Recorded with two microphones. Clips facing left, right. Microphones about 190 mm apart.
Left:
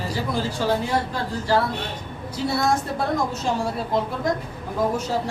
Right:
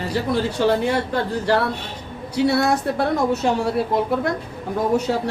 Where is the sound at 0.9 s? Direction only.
60° right (ahead or behind).